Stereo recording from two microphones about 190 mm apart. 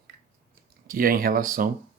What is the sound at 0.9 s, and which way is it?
Speech, 50° right (ahead or behind).